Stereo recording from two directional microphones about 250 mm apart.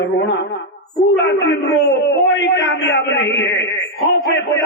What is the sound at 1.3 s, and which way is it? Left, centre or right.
A man's voice, left.